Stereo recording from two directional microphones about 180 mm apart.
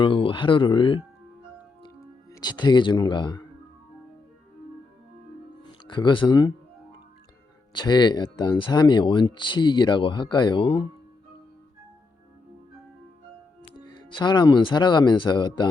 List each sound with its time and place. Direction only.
0.0 s speech: 30° left (ahead or behind)
2.3 s speech: 25° left (ahead or behind)
5.9 s speech: 25° left (ahead or behind)
7.7 s speech: 25° left (ahead or behind)
13.7 s speech: 25° left (ahead or behind)